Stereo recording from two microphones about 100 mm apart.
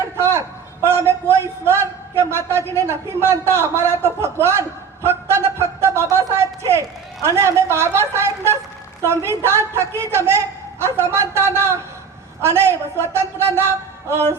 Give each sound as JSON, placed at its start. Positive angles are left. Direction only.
{"t": 0.2, "sound": "a man's voice", "side_deg": -25}
{"t": 5.0, "sound": "a sound", "side_deg": -25}
{"t": 7.3, "sound": "a man's voice", "side_deg": -25}